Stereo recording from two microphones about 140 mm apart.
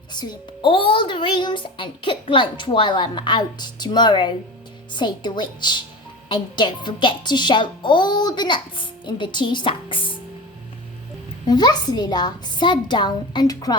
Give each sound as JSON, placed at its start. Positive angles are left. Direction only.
{"t": 0.1, "sound": "a child's voice", "side_deg": 30}
{"t": 11.4, "sound": "a child's voice", "side_deg": 30}